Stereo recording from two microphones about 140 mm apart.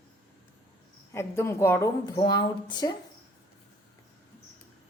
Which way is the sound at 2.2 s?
35° left (ahead or behind).